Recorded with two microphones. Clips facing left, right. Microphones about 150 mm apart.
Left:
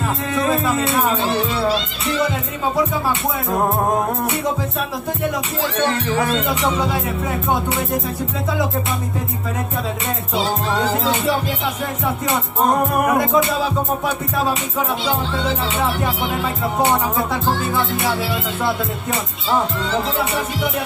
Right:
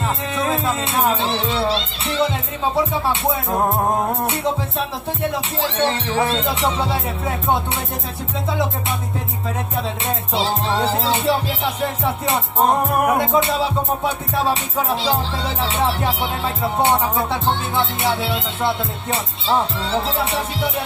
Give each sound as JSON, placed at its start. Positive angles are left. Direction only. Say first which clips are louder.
{"t": 1.1, "sound": "music", "louder": "left 1 dB", "side_deg": -25}
{"t": 5.6, "sound": "music", "louder": "even", "side_deg": -25}
{"t": 10.3, "sound": "music", "louder": "left 1 dB", "side_deg": -30}
{"t": 17.3, "sound": "music", "louder": "left 1 dB", "side_deg": -25}